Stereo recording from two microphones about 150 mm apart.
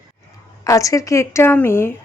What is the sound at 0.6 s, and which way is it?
A woman's voice, 20° left (ahead or behind).